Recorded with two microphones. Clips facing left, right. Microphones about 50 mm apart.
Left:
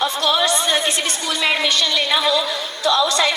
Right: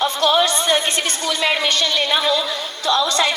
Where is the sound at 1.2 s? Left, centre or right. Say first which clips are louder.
Even; right.